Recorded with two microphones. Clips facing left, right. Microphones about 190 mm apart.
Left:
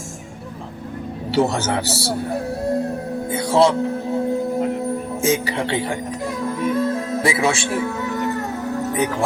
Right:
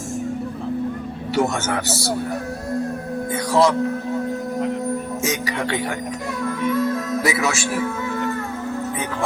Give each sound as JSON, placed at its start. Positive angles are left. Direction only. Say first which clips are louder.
{"t": 1.4, "sound": "speech", "louder": "left 2 dB", "side_deg": 30}
{"t": 5.2, "sound": "speech", "louder": "left 8 dB", "side_deg": 30}
{"t": 6.4, "sound": "music", "louder": "even", "side_deg": 30}